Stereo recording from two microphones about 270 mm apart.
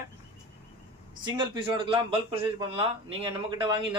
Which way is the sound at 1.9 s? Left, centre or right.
Centre.